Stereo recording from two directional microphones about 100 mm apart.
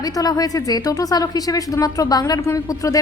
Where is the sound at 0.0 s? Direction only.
40° left (ahead or behind).